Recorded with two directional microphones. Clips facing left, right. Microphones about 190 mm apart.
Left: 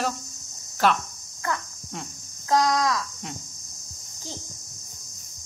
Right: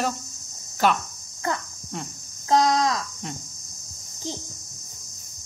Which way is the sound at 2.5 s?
25° right (ahead or behind).